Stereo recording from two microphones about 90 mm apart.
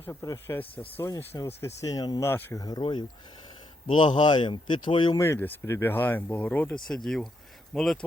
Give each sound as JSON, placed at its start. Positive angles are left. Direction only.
{"t": 0.0, "sound": "speech", "side_deg": 30}
{"t": 1.5, "sound": "speech", "side_deg": 35}
{"t": 2.2, "sound": "speech", "side_deg": 30}
{"t": 2.6, "sound": "speech", "side_deg": 45}
{"t": 3.8, "sound": "speech", "side_deg": 65}
{"t": 5.1, "sound": "speech", "side_deg": 35}
{"t": 6.8, "sound": "speech", "side_deg": 5}